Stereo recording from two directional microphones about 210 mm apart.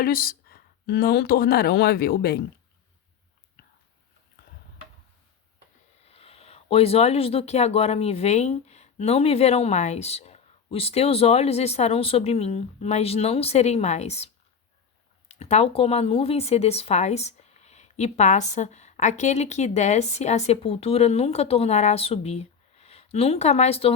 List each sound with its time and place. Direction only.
0.0 s speech: 45° left (ahead or behind)
6.1 s speech: 30° left (ahead or behind)
15.3 s speech: 30° left (ahead or behind)